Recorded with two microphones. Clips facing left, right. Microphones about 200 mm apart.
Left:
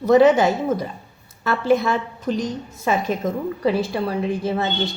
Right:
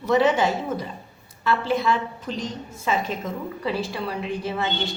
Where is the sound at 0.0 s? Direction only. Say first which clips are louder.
Left 6 dB; 40° left (ahead or behind).